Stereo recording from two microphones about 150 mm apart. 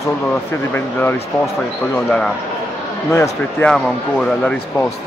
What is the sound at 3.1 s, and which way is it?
Speech, 20° left (ahead or behind).